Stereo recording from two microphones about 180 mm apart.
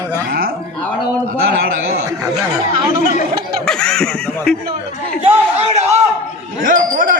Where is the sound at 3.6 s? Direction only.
5° left (ahead or behind).